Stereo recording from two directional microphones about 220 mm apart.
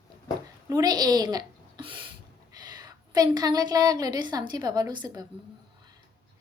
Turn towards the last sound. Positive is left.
turn(degrees=-20)  # may be behind; listen again after turning